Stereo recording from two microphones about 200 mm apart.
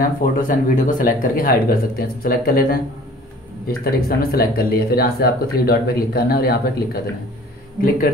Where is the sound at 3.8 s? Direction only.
50° left (ahead or behind).